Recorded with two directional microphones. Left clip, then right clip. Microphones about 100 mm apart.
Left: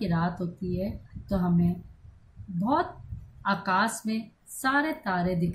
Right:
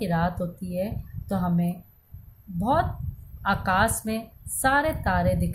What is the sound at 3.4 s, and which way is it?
A woman's voice, 60° right (ahead or behind).